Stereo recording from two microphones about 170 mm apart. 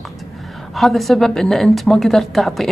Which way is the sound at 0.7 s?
Centre (ahead or behind).